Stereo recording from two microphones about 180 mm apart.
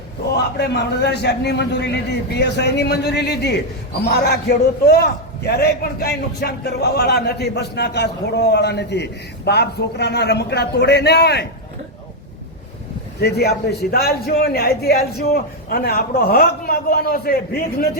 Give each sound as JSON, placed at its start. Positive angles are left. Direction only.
{"t": 0.3, "sound": "a man's voice", "side_deg": 65}
{"t": 13.1, "sound": "a man's voice", "side_deg": 65}